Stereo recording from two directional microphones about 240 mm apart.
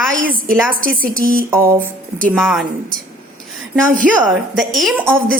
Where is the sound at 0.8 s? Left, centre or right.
Right.